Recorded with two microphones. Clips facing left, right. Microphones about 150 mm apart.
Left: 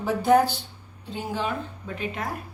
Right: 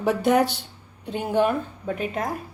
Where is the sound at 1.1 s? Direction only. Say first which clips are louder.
Right 8 dB; 60° right (ahead or behind).